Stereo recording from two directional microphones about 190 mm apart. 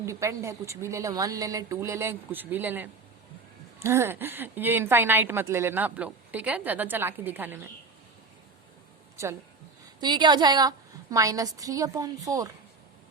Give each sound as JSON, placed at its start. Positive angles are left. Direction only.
{"t": 0.0, "sound": "a woman's voice", "side_deg": -15}
{"t": 10.0, "sound": "a woman's voice", "side_deg": -25}